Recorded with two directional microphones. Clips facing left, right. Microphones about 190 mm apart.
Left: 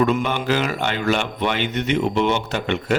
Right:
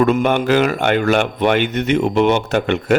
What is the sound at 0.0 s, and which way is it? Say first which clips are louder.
A man's voice: right 5 dB; 55° right (ahead or behind).